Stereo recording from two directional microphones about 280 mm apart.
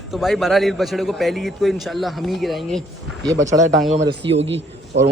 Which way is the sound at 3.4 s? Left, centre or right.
Centre.